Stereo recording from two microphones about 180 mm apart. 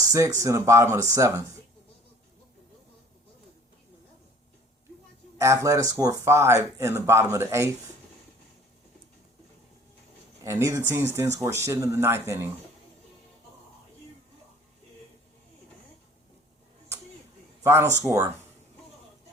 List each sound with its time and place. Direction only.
0.0 s a sound: 20° right (ahead or behind)
0.3 s speech: 15° right (ahead or behind)
5.4 s speech: 15° right (ahead or behind)
10.4 s speech: 15° right (ahead or behind)
17.6 s a man's voice: 15° right (ahead or behind)